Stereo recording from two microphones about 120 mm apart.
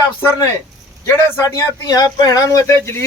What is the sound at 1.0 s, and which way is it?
A man's voice, 25° left (ahead or behind).